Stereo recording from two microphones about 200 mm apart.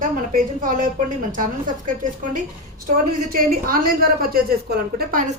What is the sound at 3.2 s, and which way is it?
A woman's voice, 45° right (ahead or behind).